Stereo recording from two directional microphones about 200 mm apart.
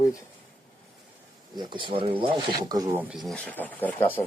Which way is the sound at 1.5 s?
20° right (ahead or behind).